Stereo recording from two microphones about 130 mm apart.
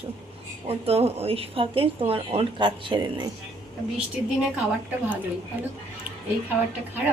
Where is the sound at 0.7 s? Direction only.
50° right (ahead or behind).